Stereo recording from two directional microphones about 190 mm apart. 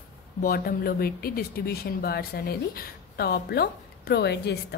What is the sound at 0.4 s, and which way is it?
Speech, 50° left (ahead or behind).